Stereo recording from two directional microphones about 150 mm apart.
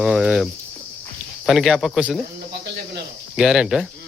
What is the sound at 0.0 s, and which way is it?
Speech, 5° right (ahead or behind).